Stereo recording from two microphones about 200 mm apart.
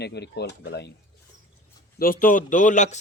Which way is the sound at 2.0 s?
45° left (ahead or behind).